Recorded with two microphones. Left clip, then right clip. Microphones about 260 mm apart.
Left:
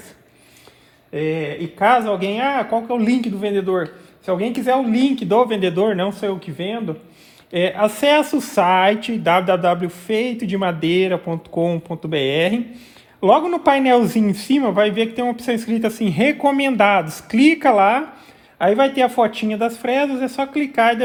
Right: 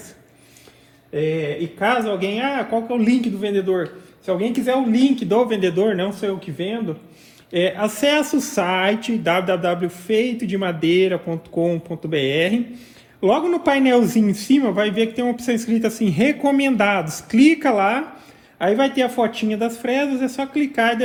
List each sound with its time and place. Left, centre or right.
1.8 s speech: left